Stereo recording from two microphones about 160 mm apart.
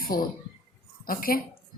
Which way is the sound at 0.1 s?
65° left (ahead or behind).